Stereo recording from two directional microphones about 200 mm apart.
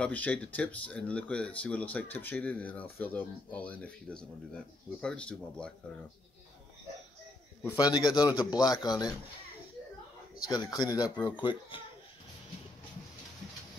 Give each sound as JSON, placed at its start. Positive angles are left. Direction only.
{"t": 0.0, "sound": "speech", "side_deg": 5}
{"t": 7.8, "sound": "a man's voice", "side_deg": -5}
{"t": 8.2, "sound": "speech", "side_deg": 20}
{"t": 10.5, "sound": "speech", "side_deg": 20}